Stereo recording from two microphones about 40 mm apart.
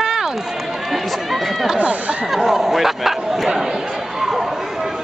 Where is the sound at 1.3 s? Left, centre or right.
Centre.